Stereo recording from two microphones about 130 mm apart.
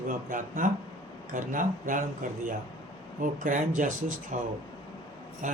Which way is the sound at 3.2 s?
85° right.